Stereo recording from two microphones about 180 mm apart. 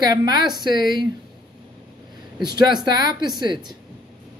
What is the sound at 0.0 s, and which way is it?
Speech, 20° right (ahead or behind).